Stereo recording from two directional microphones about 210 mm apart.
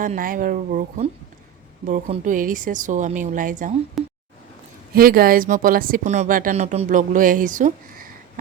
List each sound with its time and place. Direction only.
0.0 s speech: 40° right (ahead or behind)
4.0 s a sound: centre (ahead or behind)
4.9 s speech: 45° right (ahead or behind)